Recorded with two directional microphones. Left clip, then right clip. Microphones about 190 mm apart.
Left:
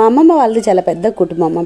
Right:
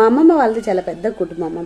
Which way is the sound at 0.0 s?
40° left (ahead or behind).